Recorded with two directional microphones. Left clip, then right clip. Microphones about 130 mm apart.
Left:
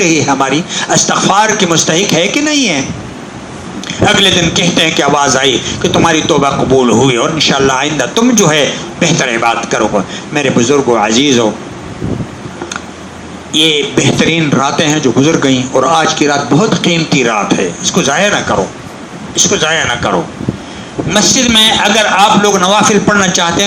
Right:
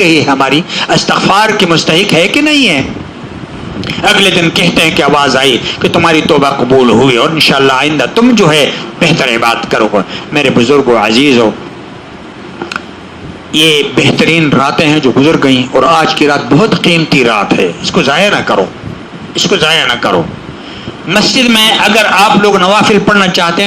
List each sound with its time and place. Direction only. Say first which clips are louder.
0.0 s a man's voice: right 3 dB; 40° right (ahead or behind)
3.8 s a man's voice: right 1 dB; 35° right (ahead or behind)
13.5 s a man's voice: right 2 dB; 35° right (ahead or behind)